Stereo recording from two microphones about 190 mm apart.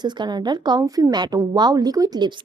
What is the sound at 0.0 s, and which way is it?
A woman's voice, 20° right (ahead or behind).